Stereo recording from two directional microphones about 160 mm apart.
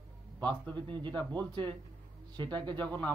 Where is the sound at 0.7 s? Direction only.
30° right (ahead or behind).